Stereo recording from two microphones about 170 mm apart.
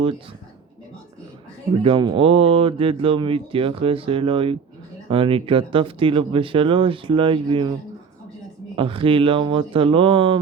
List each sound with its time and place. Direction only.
1.8 s speech: 30° right (ahead or behind)
8.7 s speech: 30° right (ahead or behind)